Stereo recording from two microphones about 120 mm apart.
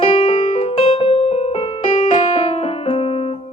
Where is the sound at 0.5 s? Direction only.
55° left (ahead or behind).